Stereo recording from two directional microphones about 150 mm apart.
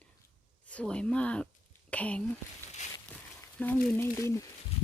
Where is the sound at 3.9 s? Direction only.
20° left (ahead or behind).